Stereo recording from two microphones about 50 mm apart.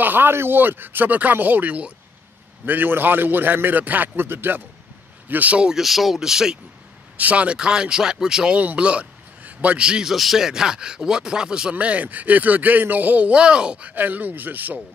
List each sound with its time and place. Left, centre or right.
0.0 s speech: right
2.6 s speech: right
5.3 s speech: right
5.6 s speech: centre
5.9 s speech: centre
7.2 s speech: right
8.5 s a man's voice: right
9.8 s speech: centre
10.1 s speech: centre
11.7 s speech: right